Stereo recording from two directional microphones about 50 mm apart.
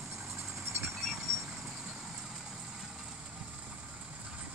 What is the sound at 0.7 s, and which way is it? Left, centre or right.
Vehicle, right.